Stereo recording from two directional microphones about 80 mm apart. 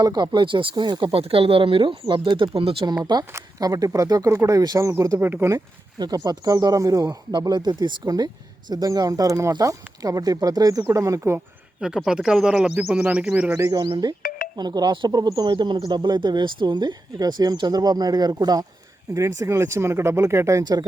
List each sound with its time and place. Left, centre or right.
0.0 s speech: right
1.6 s speech: right
3.0 s speech: right
6.0 s speech: right
10.8 s speech: right
11.8 s speech: centre
13.9 s speech: right
15.8 s speech: right
19.1 s speech: right